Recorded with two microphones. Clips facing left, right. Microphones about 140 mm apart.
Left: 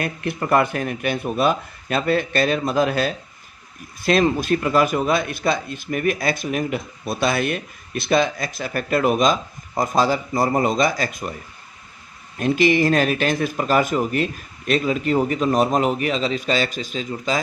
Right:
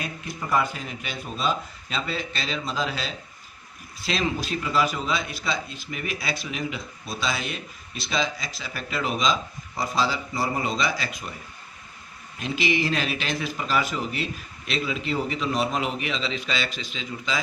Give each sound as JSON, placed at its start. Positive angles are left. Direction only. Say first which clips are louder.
{"t": 0.0, "sound": "a man's voice", "louder": "left 8 dB", "side_deg": 65}
{"t": 12.4, "sound": "a man's voice", "louder": "left 8 dB", "side_deg": 50}